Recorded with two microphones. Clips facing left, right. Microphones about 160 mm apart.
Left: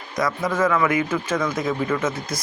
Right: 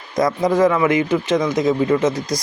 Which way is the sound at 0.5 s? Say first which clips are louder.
Right 5 dB; 35° right (ahead or behind).